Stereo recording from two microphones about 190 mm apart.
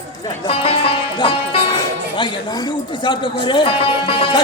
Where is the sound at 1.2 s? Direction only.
25° left (ahead or behind).